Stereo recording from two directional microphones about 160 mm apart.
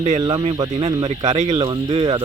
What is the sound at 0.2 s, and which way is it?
Speech, 25° right (ahead or behind).